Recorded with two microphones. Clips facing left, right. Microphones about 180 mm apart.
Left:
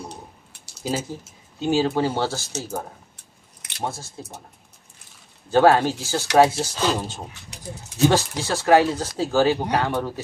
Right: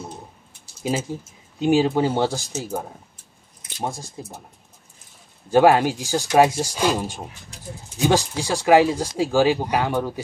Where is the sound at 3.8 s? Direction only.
15° right (ahead or behind).